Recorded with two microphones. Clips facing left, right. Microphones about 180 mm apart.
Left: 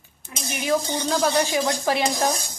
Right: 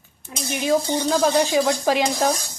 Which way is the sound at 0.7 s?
20° right (ahead or behind).